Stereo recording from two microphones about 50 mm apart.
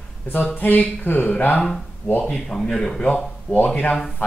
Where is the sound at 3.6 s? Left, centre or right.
Left.